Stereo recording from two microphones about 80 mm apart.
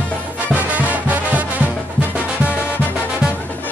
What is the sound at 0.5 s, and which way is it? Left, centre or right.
Music, right.